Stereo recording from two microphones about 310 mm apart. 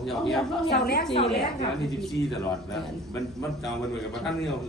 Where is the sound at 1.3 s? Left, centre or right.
Centre.